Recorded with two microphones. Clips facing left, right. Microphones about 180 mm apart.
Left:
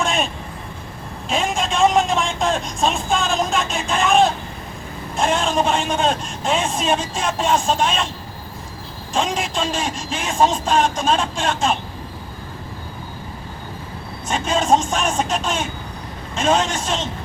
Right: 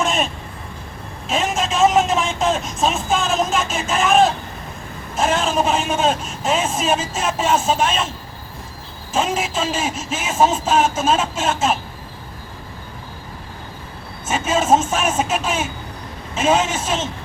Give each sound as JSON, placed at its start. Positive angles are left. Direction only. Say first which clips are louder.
{"t": 0.0, "sound": "vehicle", "louder": "right 1 dB", "side_deg": 0}
{"t": 1.3, "sound": "a sound", "louder": "right 1 dB", "side_deg": 0}
{"t": 5.1, "sound": "a man's voice", "louder": "even", "side_deg": -5}
{"t": 9.1, "sound": "a man's voice", "louder": "right 1 dB", "side_deg": -5}
{"t": 14.3, "sound": "speech", "louder": "right 1 dB", "side_deg": -5}